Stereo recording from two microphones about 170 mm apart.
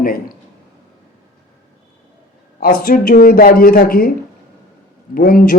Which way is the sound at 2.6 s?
60° left (ahead or behind).